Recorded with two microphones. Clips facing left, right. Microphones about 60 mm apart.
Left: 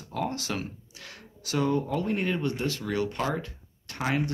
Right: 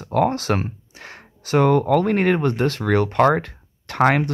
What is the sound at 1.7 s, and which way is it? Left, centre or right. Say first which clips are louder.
Speech: right 10 dB; right.